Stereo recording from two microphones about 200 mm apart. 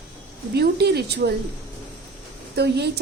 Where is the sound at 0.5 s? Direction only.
55° right (ahead or behind).